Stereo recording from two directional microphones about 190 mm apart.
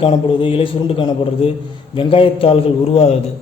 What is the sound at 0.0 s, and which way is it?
A man's voice, 25° left (ahead or behind).